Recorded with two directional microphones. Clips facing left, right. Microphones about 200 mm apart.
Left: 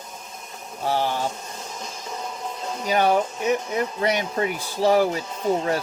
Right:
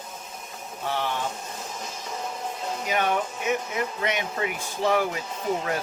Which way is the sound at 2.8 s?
35° left (ahead or behind).